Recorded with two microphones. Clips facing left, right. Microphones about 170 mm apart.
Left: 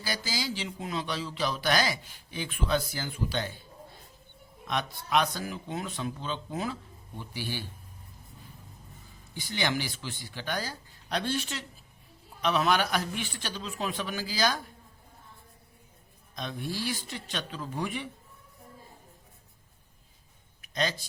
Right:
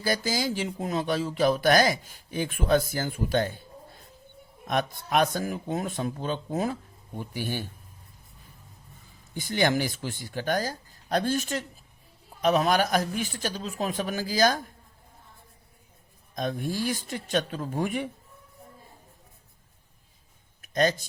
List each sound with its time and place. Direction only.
0.0 s speech: 50° right (ahead or behind)
4.6 s speech: 50° right (ahead or behind)
9.3 s speech: 45° right (ahead or behind)
16.3 s speech: 45° right (ahead or behind)
20.6 s a sound: 45° right (ahead or behind)